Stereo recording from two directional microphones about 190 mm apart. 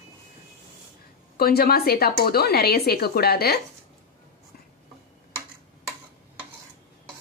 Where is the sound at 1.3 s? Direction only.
50° left (ahead or behind).